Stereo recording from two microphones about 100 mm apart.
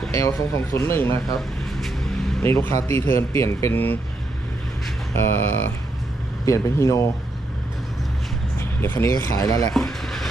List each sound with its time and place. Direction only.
0.1 s speech: 25° left (ahead or behind)
1.4 s a sound: centre (ahead or behind)
2.4 s speech: 25° left (ahead or behind)
5.1 s a man's voice: 20° left (ahead or behind)
8.8 s speech: 25° left (ahead or behind)
9.1 s a man's voice: 35° left (ahead or behind)
9.7 s a sound: centre (ahead or behind)